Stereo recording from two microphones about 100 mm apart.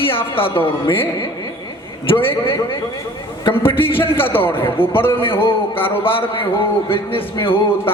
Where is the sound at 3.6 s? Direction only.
20° left (ahead or behind).